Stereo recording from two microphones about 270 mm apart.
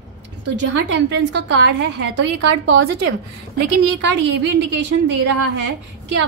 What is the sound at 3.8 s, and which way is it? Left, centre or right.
Speech, right.